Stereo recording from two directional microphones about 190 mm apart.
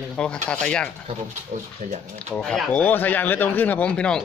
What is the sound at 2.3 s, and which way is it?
Speech, 5° left (ahead or behind).